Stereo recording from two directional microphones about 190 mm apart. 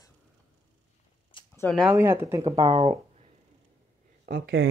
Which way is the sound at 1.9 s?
10° right (ahead or behind).